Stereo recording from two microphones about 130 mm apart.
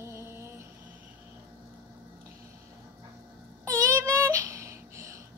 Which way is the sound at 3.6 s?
25° right (ahead or behind).